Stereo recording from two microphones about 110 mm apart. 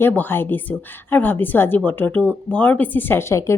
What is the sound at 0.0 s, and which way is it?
A woman's voice, 20° left (ahead or behind).